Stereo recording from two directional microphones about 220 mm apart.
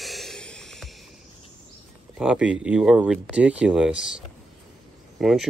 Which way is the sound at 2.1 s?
5° right (ahead or behind).